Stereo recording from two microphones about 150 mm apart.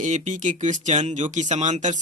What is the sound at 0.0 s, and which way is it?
Speech, 55° right (ahead or behind).